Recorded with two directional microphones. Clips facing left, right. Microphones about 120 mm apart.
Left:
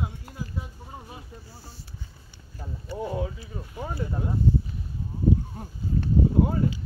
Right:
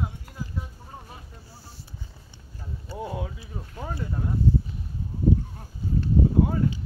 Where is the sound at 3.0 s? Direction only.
5° right (ahead or behind).